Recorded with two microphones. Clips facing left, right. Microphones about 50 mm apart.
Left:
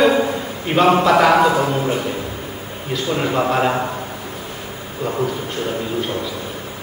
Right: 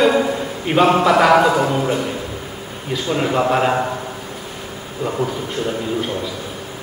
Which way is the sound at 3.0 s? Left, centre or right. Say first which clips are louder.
Right 1 dB; centre.